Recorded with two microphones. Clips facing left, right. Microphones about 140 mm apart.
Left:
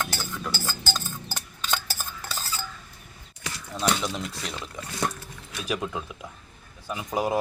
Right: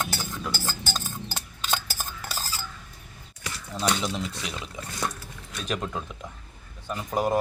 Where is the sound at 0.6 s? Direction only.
20° right (ahead or behind).